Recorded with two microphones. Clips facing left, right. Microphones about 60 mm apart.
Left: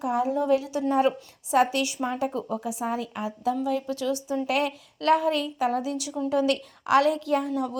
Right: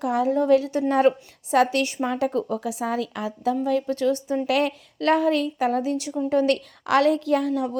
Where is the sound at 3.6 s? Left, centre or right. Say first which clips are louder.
Right 5 dB; right.